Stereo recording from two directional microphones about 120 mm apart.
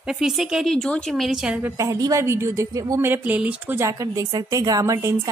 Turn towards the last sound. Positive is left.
turn(degrees=-25)  # may be behind; listen again after turning